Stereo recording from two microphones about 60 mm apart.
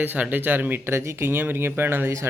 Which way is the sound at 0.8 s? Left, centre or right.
Right.